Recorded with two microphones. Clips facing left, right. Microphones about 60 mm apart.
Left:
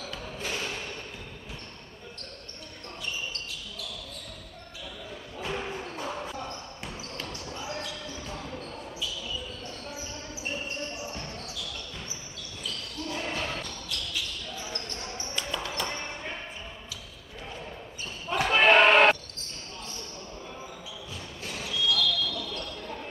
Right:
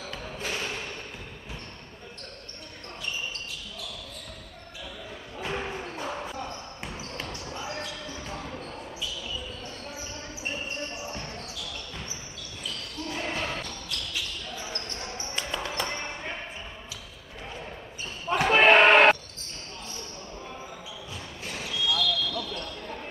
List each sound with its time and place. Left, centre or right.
0.2 s a sound: centre
5.4 s music: centre
6.8 s basketball bounce: right
13.1 s basketball bounce: centre
15.3 s basketball bounce: right
18.3 s basketball bounce: right
21.5 s basketball bounce: centre